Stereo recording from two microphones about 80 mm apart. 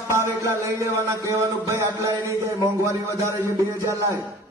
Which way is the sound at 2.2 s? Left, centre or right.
Right.